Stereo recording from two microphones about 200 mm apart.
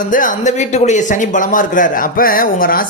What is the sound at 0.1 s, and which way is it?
Speech, 40° left (ahead or behind).